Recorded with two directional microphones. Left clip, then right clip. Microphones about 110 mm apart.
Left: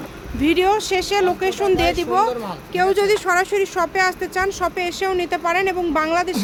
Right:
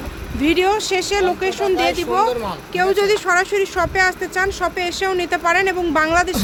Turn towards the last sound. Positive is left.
turn(degrees=0)  # may be behind; listen again after turning